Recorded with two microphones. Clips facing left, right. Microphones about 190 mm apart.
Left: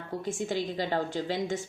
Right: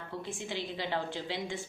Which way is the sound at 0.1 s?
45° left (ahead or behind).